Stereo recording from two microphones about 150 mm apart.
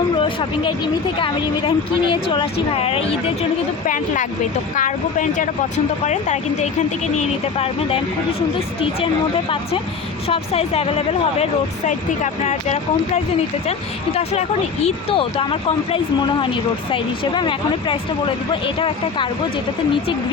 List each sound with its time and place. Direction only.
1.2 s speech: 35° left (ahead or behind)
3.8 s a woman's voice: 60° left (ahead or behind)
10.2 s speech: 40° left (ahead or behind)